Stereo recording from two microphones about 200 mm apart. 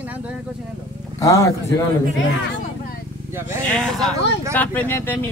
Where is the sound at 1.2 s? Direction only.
15° left (ahead or behind).